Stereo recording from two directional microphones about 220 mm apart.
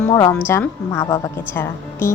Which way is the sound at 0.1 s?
15° left (ahead or behind).